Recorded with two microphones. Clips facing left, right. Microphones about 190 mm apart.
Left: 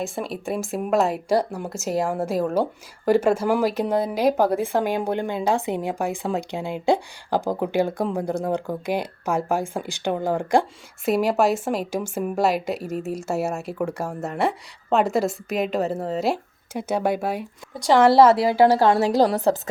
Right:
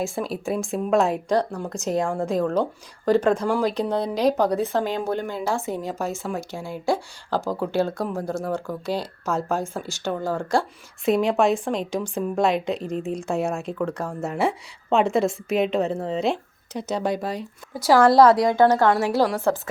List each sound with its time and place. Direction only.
0.0 s a woman's voice: centre (ahead or behind); by 10.7 s 15° left (ahead or behind)
11.0 s a woman's voice: 5° left (ahead or behind)
14.3 s a woman's voice: centre (ahead or behind)
19.3 s a woman's voice: 35° left (ahead or behind)